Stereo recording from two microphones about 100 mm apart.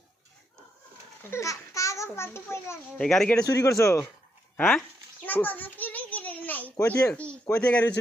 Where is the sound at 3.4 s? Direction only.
35° left (ahead or behind).